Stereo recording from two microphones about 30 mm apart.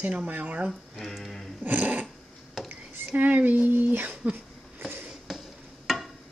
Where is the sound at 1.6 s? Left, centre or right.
Right.